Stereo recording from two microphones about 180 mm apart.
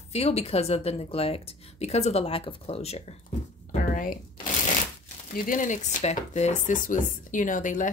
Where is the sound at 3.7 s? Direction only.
45° left (ahead or behind).